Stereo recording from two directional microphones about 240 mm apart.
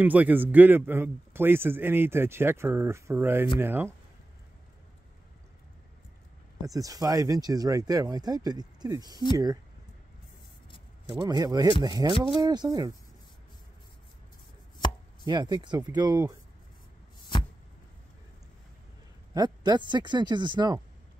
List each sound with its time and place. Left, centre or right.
0.0 s a man's voice: centre
6.6 s a man's voice: centre
11.1 s a man's voice: centre
15.2 s a man's voice: centre
19.3 s speech: centre